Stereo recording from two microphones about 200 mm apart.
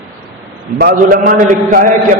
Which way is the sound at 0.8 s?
50° right (ahead or behind).